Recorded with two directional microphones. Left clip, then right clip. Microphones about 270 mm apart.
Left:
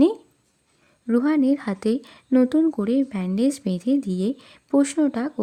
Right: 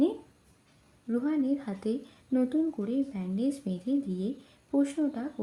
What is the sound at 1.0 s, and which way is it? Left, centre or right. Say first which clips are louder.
A woman's voice: left 10 dB; left.